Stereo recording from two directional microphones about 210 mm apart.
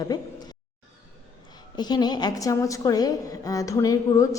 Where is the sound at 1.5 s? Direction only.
20° left (ahead or behind).